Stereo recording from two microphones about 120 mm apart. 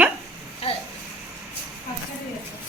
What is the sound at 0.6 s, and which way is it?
Speech, 55° left (ahead or behind).